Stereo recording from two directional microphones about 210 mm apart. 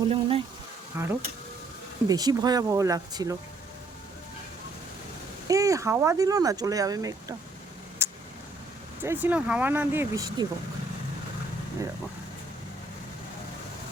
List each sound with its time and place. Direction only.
0.1 s speech: 25° right (ahead or behind)
0.9 s speech: 10° right (ahead or behind)
5.5 s speech: 15° right (ahead or behind)
8.0 s vehicle: 10° right (ahead or behind)
9.0 s speech: 10° right (ahead or behind)